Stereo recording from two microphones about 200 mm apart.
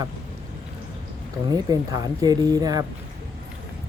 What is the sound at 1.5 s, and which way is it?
Speech, 20° right (ahead or behind).